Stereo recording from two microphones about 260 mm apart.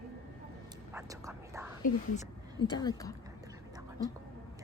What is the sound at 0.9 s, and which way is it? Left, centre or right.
Whispering, centre.